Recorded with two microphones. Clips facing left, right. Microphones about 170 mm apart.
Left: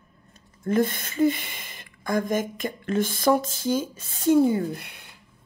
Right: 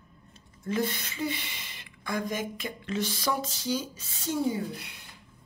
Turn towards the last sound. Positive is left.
turn(degrees=55)  # may be behind; listen again after turning